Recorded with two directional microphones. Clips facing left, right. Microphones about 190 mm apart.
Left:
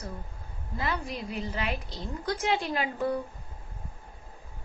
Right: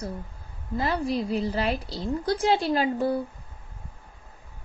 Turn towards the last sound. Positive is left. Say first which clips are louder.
# right 5 dB
turn(degrees=-35)  # may be behind; listen again after turning